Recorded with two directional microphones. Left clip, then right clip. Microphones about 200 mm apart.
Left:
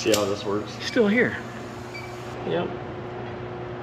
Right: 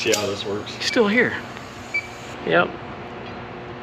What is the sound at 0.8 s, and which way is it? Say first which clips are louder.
Speech: right 3 dB; 15° left (ahead or behind).